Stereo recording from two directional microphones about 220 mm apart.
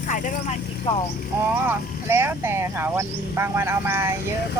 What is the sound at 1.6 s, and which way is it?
Speech, 10° right (ahead or behind).